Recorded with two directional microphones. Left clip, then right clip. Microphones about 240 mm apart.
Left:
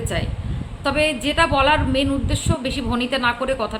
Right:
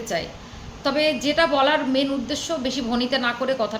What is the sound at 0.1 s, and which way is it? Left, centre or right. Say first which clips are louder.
A woman's voice: even; centre.